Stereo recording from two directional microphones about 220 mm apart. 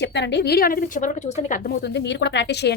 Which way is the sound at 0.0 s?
50° left (ahead or behind).